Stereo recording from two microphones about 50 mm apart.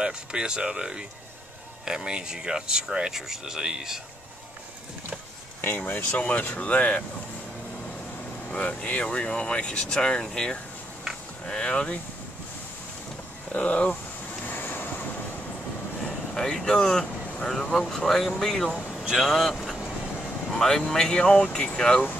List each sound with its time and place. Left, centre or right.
0.0 s speech: centre
5.9 s speech: left
6.6 s speech: left
8.5 s speech: left
13.5 s speech: left
14.4 s vehicle: left
16.0 s speech: centre
19.0 s speech: centre
20.4 s speech: centre